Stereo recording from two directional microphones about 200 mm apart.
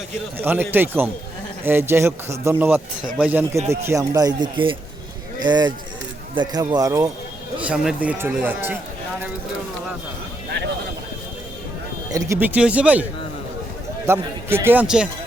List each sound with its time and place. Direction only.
0.3 s speech: 10° right (ahead or behind)
7.6 s speech: 5° right (ahead or behind)
12.1 s speech: 10° right (ahead or behind)
14.1 s speech: 10° right (ahead or behind)